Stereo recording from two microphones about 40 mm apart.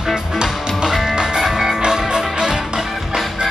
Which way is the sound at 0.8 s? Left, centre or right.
Centre.